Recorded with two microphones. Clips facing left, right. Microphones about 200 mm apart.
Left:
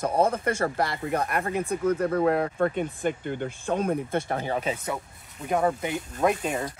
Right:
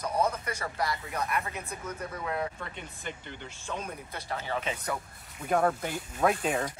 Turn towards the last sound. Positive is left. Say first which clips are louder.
# left 2 dB
turn(degrees=0)  # may be behind; listen again after turning